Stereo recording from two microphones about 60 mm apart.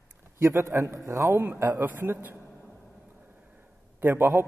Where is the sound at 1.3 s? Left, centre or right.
Right.